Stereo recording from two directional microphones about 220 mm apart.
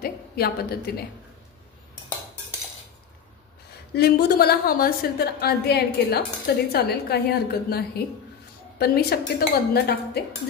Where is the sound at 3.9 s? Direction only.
45° left (ahead or behind).